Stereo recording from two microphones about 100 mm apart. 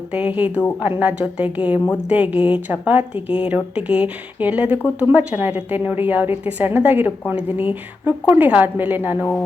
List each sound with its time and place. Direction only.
0.1 s a woman's voice: 15° right (ahead or behind)